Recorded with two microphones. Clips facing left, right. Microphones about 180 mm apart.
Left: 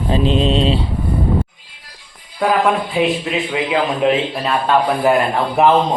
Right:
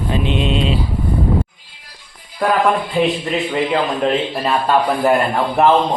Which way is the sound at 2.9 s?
5° left (ahead or behind).